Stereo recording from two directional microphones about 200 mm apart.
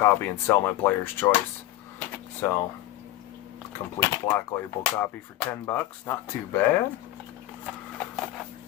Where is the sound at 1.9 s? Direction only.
10° left (ahead or behind).